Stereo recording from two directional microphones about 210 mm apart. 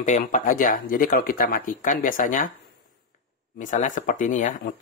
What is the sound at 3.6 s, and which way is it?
Speech, 40° left (ahead or behind).